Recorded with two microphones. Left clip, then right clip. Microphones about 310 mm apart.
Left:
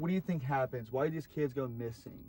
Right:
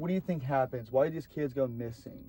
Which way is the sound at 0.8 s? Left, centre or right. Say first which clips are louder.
Right 6 dB; centre.